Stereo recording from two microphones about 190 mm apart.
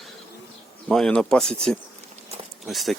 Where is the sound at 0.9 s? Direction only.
5° left (ahead or behind).